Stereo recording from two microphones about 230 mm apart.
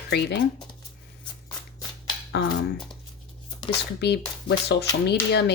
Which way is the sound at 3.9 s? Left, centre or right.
Left.